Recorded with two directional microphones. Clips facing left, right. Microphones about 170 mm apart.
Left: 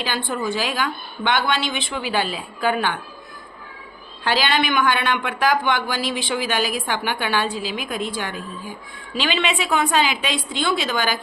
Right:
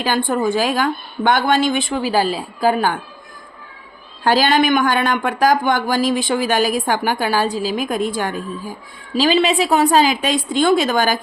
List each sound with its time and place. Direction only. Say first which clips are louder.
0.0 s speech: right 7 dB; 45° right (ahead or behind)
4.2 s a woman's voice: right 6 dB; 45° right (ahead or behind)